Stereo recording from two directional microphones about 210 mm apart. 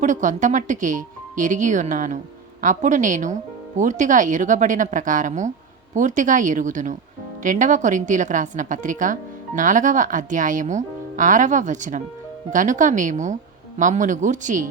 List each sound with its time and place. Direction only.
0.0 s speech: 35° right (ahead or behind)